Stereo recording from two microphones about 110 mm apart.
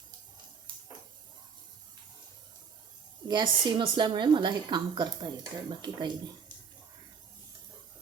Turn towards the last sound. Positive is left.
turn(degrees=-40)  # may be behind; listen again after turning